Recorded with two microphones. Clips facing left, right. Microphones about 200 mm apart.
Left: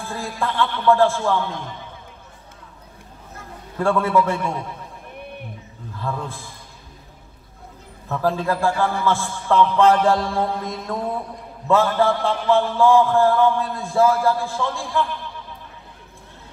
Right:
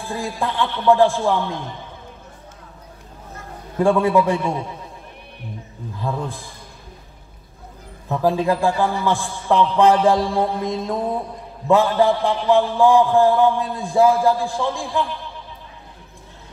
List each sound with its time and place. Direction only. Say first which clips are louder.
0.1 s a man's voice: right 2 dB; 15° right (ahead or behind)
3.7 s a man's voice: right 3 dB; 15° right (ahead or behind)
5.9 s a man's voice: right 2 dB; 15° right (ahead or behind)
8.1 s a man's voice: right 3 dB; 15° right (ahead or behind)